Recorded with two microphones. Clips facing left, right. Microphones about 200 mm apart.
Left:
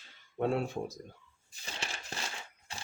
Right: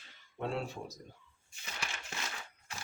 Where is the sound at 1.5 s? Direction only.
30° left (ahead or behind).